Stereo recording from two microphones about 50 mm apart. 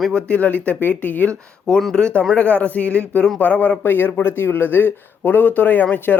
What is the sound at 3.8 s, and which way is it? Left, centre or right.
Speech, left.